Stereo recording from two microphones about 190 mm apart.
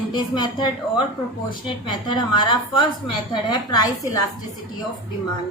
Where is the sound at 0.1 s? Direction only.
20° left (ahead or behind).